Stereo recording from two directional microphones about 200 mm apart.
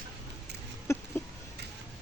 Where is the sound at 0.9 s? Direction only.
15° left (ahead or behind).